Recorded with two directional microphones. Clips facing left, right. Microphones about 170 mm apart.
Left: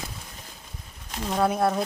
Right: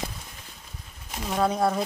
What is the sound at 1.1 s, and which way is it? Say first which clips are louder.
Speech: left 1 dB; 5° right (ahead or behind).